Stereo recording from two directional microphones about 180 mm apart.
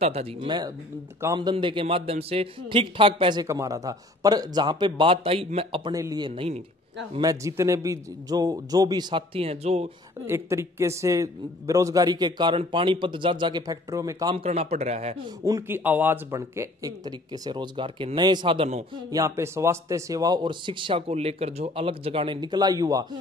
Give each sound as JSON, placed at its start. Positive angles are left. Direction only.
{"t": 0.0, "sound": "a man's voice", "side_deg": -35}
{"t": 7.2, "sound": "a man's voice", "side_deg": -20}
{"t": 10.2, "sound": "a man's voice", "side_deg": -15}
{"t": 14.3, "sound": "speech", "side_deg": -35}
{"t": 15.4, "sound": "a man's voice", "side_deg": -15}
{"t": 19.0, "sound": "a man's voice", "side_deg": -20}